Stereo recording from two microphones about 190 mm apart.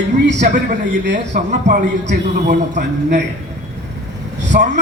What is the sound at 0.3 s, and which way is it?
A man's voice, 40° right (ahead or behind).